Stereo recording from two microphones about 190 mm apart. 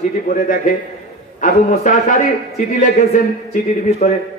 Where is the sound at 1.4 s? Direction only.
45° left (ahead or behind).